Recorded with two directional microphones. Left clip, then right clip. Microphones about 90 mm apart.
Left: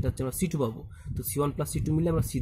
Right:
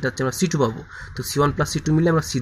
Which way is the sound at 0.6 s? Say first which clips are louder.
Right 9 dB; 10° left (ahead or behind).